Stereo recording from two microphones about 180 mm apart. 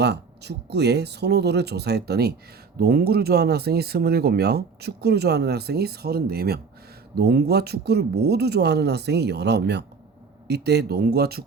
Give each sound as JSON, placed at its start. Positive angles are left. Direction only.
{"t": 0.0, "sound": "speech", "side_deg": -65}